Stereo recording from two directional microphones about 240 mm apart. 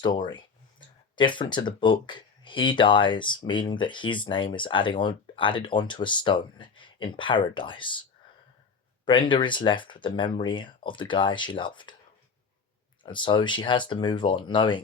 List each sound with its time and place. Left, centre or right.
0.0 s speech: centre
9.0 s speech: left
13.0 s speech: centre